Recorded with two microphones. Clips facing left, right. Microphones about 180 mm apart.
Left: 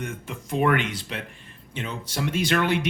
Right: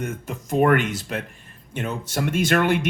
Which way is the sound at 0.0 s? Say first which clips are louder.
Right 4 dB; 45° right (ahead or behind).